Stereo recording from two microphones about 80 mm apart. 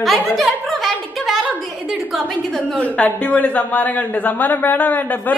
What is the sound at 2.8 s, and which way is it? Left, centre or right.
A man's voice, centre.